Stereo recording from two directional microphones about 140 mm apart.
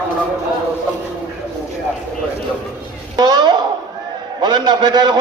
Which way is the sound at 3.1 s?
30° right (ahead or behind).